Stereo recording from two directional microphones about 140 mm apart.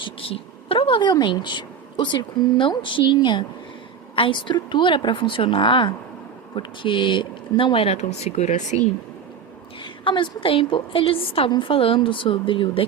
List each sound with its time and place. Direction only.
0.0 s a woman's voice: 40° left (ahead or behind)
9.8 s a woman's voice: 35° left (ahead or behind)